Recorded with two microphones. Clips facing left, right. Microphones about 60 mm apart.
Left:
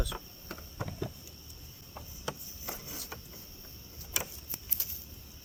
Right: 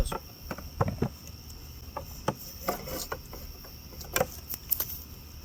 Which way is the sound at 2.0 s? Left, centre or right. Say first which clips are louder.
Right 9 dB; right.